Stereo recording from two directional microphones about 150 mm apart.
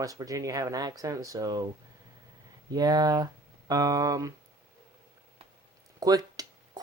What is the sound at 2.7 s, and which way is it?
Speech, 25° right (ahead or behind).